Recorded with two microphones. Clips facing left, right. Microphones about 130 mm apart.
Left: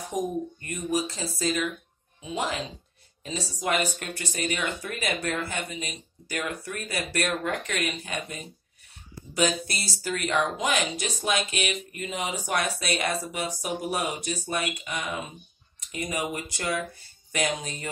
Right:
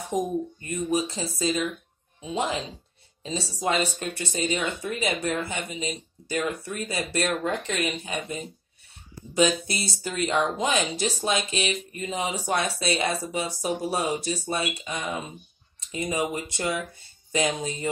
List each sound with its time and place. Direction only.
0.1 s speech: 25° right (ahead or behind)